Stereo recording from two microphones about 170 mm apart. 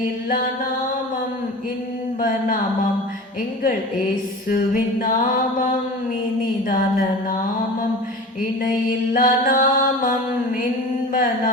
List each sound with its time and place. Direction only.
4.4 s music: 55° left (ahead or behind)
9.1 s music: 55° left (ahead or behind)
11.1 s a sound: 55° left (ahead or behind)